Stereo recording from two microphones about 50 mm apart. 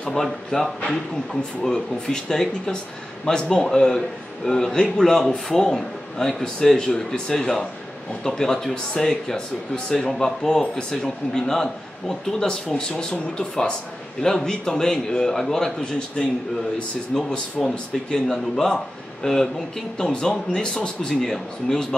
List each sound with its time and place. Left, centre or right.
0.1 s speech: centre
17.6 s speech: centre
18.1 s speech: centre